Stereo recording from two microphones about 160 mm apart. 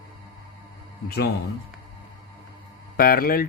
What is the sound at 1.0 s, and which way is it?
Speech, 85° left.